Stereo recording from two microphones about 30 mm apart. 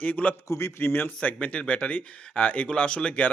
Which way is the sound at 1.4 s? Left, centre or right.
Left.